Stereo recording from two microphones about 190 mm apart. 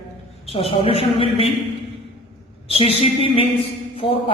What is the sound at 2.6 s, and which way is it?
Speech, 30° left (ahead or behind).